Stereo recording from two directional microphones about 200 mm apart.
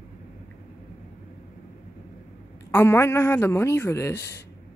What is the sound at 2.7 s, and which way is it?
Speech, 15° left (ahead or behind).